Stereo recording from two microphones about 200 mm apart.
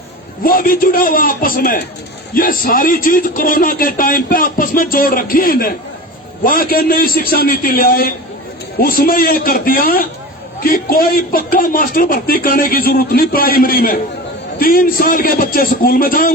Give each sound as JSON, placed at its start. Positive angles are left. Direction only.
{"t": 0.4, "sound": "a man's voice", "side_deg": 45}